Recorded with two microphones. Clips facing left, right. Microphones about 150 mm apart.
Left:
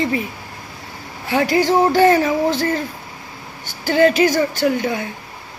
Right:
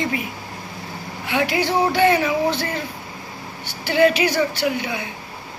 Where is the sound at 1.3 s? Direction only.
40° left (ahead or behind).